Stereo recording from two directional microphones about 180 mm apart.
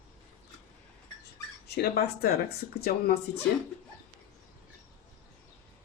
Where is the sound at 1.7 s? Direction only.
60° left (ahead or behind).